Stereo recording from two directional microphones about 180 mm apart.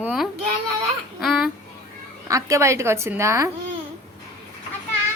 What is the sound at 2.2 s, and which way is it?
Speech, 15° right (ahead or behind).